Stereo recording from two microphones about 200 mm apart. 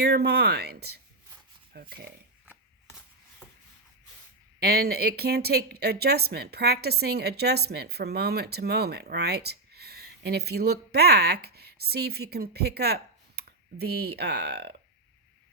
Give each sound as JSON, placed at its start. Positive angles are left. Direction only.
{"t": 0.0, "sound": "speech", "side_deg": -55}
{"t": 3.4, "sound": "a sound", "side_deg": 5}
{"t": 4.6, "sound": "speech", "side_deg": -50}